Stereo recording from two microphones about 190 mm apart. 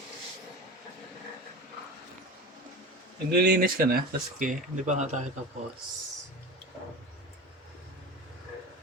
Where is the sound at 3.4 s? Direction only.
50° right (ahead or behind).